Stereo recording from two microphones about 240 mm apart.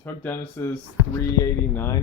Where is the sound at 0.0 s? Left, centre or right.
Centre.